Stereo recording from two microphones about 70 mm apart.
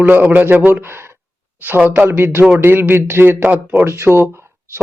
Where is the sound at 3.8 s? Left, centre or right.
Right.